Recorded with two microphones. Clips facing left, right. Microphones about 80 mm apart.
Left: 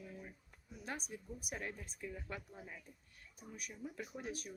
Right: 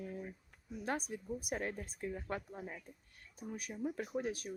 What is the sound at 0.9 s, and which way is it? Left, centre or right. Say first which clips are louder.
Speech: right 7 dB; right.